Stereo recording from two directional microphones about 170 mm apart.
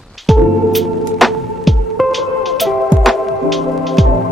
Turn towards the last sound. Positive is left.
turn(degrees=0)  # may be behind; listen again after turning